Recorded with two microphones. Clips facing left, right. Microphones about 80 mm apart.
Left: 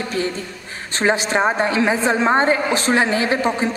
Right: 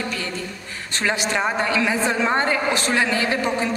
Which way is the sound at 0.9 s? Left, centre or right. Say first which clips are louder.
Left 5 dB; left.